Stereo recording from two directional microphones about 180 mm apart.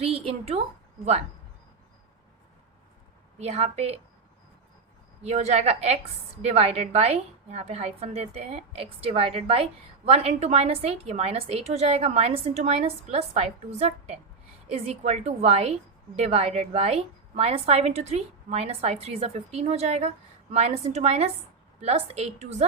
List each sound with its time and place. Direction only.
0.0 s a woman's voice: 30° right (ahead or behind)
3.3 s a woman's voice: 35° right (ahead or behind)
5.2 s a woman's voice: 40° right (ahead or behind)